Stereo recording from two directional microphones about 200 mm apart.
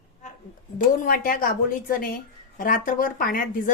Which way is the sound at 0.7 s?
45° left (ahead or behind).